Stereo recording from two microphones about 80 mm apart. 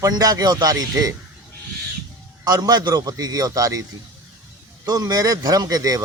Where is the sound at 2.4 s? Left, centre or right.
Right.